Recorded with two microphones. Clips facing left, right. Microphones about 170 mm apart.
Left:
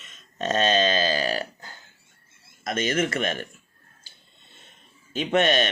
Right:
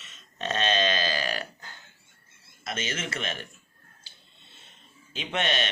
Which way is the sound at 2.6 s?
50° left (ahead or behind).